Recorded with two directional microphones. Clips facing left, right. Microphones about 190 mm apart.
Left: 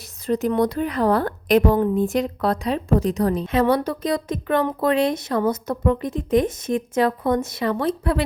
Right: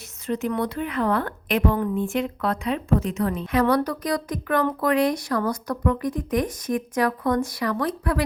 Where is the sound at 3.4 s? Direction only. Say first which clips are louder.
Right 1 dB; 25° left (ahead or behind).